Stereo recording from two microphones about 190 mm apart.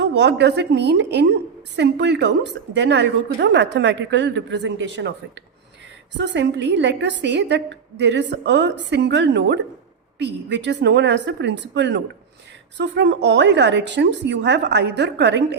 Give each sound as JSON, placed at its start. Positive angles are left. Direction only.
{"t": 0.0, "sound": "a woman's voice", "side_deg": -65}